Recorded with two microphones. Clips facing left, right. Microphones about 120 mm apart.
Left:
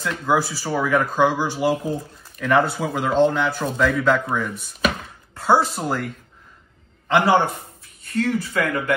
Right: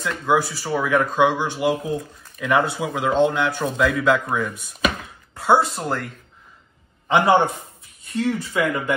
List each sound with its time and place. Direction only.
0.0 s speech: centre (ahead or behind)
7.1 s a man's voice: 20° right (ahead or behind)
8.1 s speech: centre (ahead or behind)